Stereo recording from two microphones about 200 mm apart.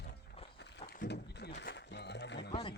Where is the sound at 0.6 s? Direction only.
55° left (ahead or behind).